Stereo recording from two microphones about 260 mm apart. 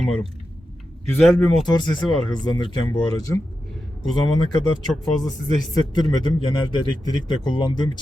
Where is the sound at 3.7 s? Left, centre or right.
Centre.